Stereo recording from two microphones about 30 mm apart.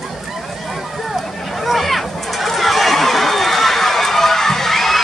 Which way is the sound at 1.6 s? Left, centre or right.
Centre.